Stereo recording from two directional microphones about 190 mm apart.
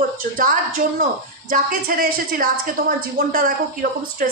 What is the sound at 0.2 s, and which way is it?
A man's voice, 45° right (ahead or behind).